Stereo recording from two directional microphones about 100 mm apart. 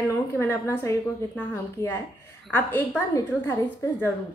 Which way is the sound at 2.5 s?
20° left (ahead or behind).